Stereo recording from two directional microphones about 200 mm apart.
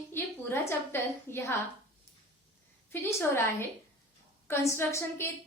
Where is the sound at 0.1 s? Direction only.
10° left (ahead or behind).